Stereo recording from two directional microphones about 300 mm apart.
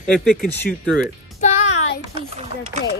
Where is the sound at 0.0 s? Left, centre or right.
Centre.